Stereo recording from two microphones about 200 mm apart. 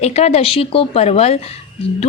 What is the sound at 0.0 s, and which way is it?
A woman's voice, 30° left (ahead or behind).